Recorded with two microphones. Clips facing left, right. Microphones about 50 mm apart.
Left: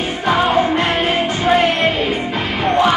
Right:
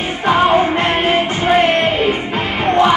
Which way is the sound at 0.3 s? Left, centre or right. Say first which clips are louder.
Right 2 dB; right.